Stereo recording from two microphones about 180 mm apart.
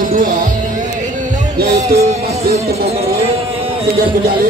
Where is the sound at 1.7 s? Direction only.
40° right (ahead or behind).